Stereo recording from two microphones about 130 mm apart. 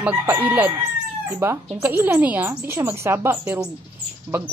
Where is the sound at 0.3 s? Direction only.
15° right (ahead or behind).